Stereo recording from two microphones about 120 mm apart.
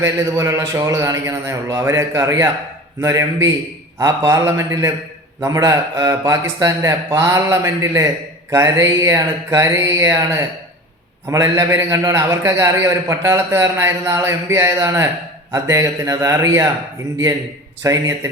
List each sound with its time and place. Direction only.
0.0 s speech: 25° right (ahead or behind)
17.8 s speech: 30° right (ahead or behind)